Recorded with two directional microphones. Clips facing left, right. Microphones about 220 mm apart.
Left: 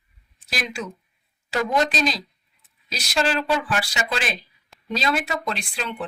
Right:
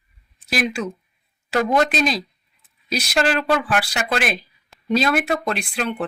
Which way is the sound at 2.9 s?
55° right (ahead or behind).